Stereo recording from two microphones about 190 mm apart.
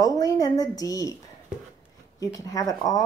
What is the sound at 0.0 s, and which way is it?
Speech, 20° left (ahead or behind).